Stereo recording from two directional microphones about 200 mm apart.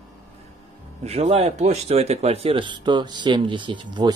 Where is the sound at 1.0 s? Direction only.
30° right (ahead or behind).